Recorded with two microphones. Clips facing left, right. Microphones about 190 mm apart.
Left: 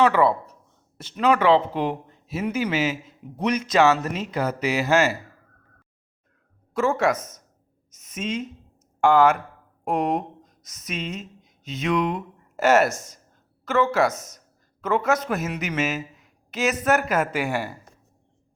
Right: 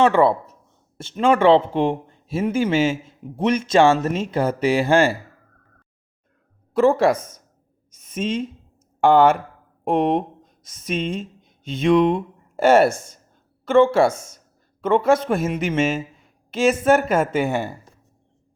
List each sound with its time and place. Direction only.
0.0 s speech: 25° right (ahead or behind)
6.7 s speech: 35° right (ahead or behind)
7.9 s a sound: 30° right (ahead or behind)
9.0 s speech: 30° right (ahead or behind)